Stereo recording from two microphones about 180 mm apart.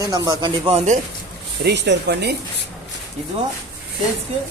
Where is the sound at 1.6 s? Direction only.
70° right (ahead or behind).